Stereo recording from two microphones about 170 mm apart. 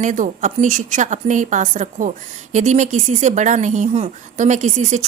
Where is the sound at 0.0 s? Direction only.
50° right (ahead or behind).